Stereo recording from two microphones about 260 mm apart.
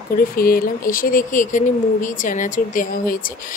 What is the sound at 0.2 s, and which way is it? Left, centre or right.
Speech, left.